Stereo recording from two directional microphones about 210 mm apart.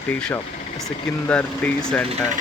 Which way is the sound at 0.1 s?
5° left (ahead or behind).